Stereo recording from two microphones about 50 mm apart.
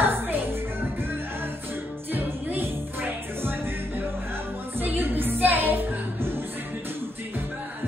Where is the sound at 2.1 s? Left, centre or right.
Right.